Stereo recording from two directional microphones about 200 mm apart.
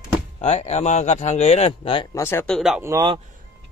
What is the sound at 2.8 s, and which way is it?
Speech, 20° right (ahead or behind).